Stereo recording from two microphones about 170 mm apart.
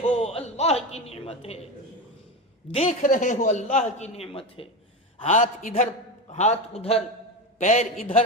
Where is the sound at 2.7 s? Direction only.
35° left (ahead or behind).